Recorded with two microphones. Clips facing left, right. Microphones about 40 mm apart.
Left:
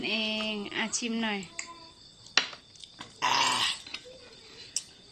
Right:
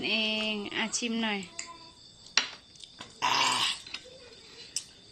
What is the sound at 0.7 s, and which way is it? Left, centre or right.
Speech, centre.